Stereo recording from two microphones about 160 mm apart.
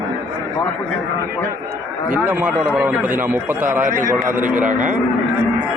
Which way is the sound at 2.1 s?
10° right (ahead or behind).